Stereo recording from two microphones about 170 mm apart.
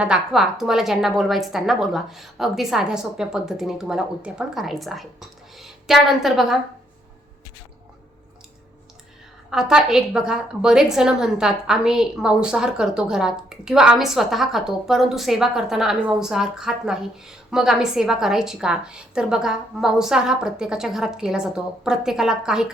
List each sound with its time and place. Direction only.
0.0 s a woman's voice: 5° right (ahead or behind)
9.5 s a woman's voice: 5° right (ahead or behind)